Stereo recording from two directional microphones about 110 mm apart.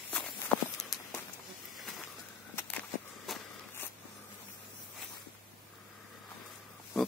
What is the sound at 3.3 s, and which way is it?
Walk, centre (ahead or behind).